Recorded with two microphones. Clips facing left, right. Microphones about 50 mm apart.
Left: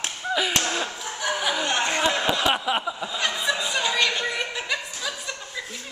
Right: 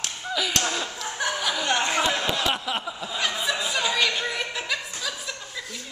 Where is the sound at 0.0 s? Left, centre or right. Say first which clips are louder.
Left 3 dB; left.